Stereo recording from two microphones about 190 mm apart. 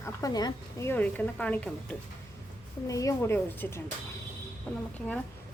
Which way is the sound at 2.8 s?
15° left (ahead or behind).